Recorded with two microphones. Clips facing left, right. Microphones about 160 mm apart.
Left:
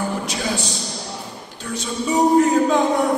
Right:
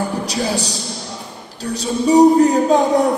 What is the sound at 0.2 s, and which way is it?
Speech, 35° right (ahead or behind).